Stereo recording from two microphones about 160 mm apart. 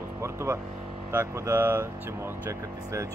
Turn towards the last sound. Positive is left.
turn(degrees=-20)  # may be behind; listen again after turning